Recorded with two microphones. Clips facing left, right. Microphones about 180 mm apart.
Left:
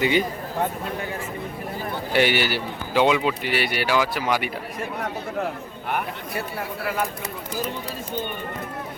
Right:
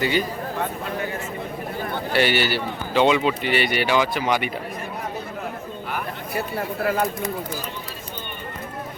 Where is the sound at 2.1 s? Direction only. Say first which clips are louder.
Even; 15° left (ahead or behind).